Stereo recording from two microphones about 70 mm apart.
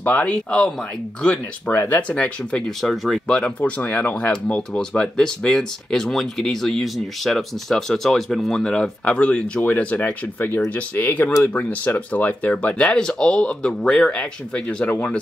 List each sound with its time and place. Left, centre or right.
0.0 s speech: left
1.9 s speech: centre
2.8 s speech: centre
3.3 s speech: centre